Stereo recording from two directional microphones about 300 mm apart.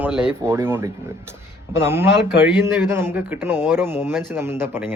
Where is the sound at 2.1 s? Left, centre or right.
Left.